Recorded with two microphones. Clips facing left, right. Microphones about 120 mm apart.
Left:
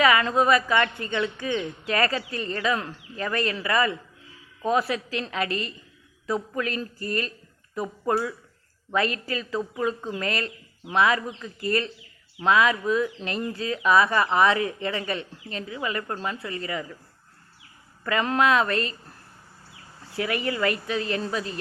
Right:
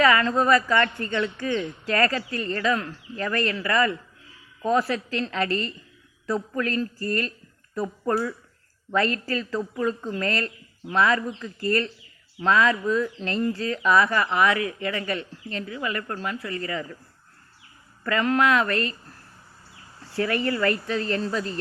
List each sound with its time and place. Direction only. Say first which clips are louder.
0.0 s a woman's voice: even; 15° left (ahead or behind)
8.1 s speech: even; 5° left (ahead or behind)
8.9 s a woman's voice: right 2 dB; 15° left (ahead or behind)
18.0 s speech: right 1 dB; 20° left (ahead or behind)
20.1 s a woman's voice: right 2 dB; 15° left (ahead or behind)